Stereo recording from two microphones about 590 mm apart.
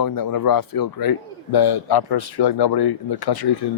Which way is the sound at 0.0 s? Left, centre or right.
Left.